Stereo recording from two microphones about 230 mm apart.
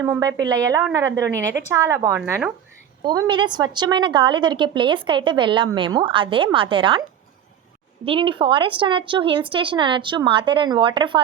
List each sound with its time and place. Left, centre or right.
0.0 s a woman's voice: centre
8.0 s a woman's voice: right